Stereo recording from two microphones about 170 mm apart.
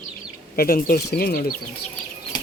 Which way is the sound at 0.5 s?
60° left (ahead or behind).